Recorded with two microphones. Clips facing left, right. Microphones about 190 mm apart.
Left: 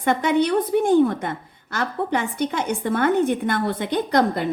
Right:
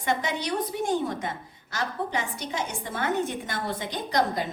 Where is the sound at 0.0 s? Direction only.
55° left (ahead or behind).